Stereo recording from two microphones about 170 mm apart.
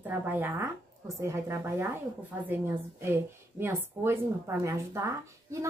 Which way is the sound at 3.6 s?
15° right (ahead or behind).